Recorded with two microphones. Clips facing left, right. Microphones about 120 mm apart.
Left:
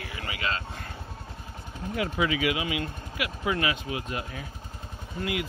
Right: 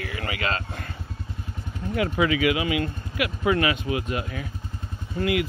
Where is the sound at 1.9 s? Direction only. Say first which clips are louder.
Right 4 dB; 75° right (ahead or behind).